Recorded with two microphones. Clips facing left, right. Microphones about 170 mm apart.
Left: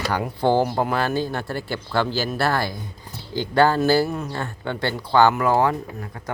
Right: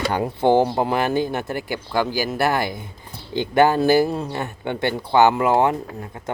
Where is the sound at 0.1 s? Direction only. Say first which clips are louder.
Right 2 dB; 25° right (ahead or behind).